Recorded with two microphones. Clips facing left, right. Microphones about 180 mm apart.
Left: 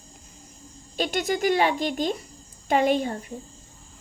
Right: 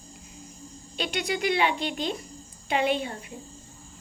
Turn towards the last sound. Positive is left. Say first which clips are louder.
# left 4 dB
turn(degrees=40)  # may be behind; listen again after turning